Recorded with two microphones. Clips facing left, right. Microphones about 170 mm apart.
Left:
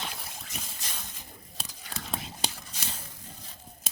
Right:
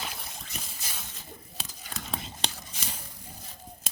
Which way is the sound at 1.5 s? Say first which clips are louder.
Left 1 dB; centre (ahead or behind).